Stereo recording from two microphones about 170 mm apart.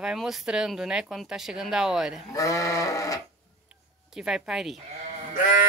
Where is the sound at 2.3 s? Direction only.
20° left (ahead or behind).